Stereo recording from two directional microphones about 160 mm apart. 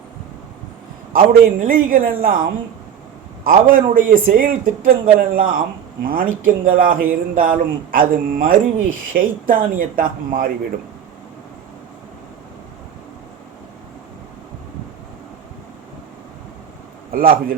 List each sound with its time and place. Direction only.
1.1 s speech: 60° right (ahead or behind)
17.1 s a man's voice: 65° right (ahead or behind)